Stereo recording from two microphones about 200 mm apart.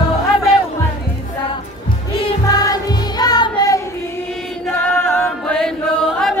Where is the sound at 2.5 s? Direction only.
20° left (ahead or behind).